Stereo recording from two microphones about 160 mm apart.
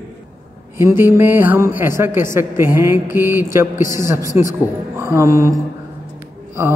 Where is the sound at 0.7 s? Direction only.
15° right (ahead or behind).